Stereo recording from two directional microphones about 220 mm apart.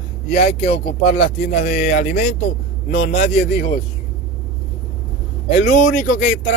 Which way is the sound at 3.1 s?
30° left (ahead or behind).